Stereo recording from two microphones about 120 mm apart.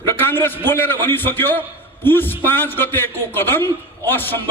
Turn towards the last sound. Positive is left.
turn(degrees=15)  # may be behind; listen again after turning